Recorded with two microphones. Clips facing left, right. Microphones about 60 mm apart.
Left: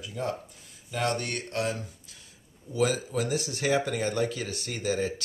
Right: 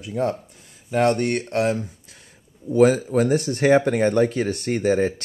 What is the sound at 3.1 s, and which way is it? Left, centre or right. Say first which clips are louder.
Speech: right 10 dB; right.